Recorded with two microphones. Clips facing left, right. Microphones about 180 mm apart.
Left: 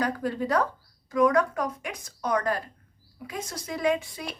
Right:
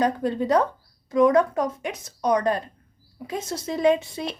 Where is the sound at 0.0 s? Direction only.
25° right (ahead or behind).